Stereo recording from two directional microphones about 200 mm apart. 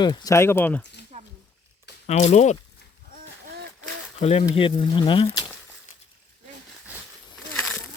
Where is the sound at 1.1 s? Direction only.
35° right (ahead or behind).